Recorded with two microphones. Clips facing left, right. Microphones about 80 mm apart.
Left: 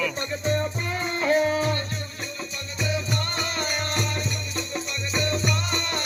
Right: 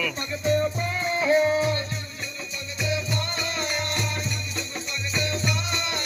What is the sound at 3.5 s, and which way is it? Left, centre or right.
Music, left.